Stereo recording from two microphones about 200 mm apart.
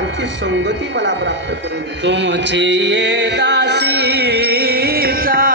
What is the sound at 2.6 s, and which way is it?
Music, 60° right (ahead or behind).